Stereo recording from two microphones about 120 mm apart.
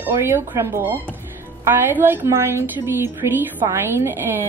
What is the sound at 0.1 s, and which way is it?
A woman's voice, 20° right (ahead or behind).